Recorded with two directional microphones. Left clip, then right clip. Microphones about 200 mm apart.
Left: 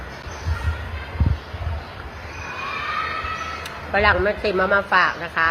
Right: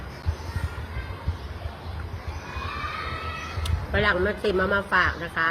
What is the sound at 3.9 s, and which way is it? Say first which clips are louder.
A man's voice: left 5 dB; 20° right (ahead or behind).